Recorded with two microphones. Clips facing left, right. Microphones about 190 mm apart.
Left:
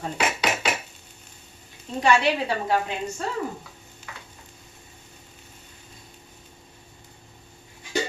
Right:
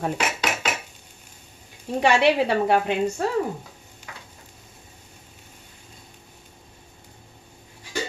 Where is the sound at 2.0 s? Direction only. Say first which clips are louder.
Right 3 dB; 65° right (ahead or behind).